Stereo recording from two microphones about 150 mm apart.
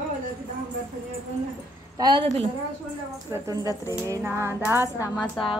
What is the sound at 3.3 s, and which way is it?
A woman's voice, 25° right (ahead or behind).